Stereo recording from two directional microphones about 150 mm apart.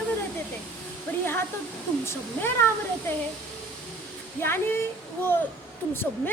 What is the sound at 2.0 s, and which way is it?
Speech, 15° left (ahead or behind).